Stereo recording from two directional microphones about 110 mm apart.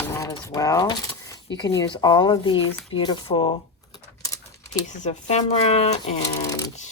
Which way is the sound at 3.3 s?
75° left (ahead or behind).